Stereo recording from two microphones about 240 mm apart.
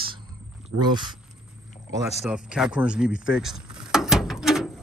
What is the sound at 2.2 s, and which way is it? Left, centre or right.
Speech, centre.